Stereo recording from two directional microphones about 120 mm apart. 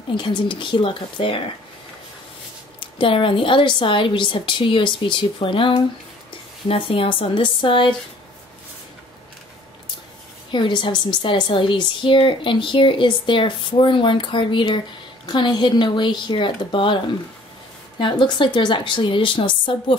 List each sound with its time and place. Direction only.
0.1 s a woman's voice: 45° left (ahead or behind)
2.8 s a woman's voice: 45° left (ahead or behind)
10.5 s a woman's voice: 40° left (ahead or behind)